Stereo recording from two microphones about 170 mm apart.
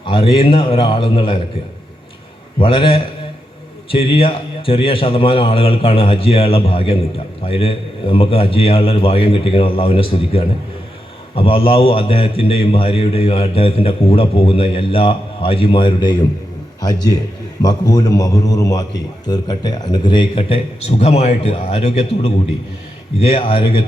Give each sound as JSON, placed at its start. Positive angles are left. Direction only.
{"t": 0.0, "sound": "a man's voice", "side_deg": 30}
{"t": 2.6, "sound": "a man's voice", "side_deg": 30}
{"t": 17.6, "sound": "a man's voice", "side_deg": 25}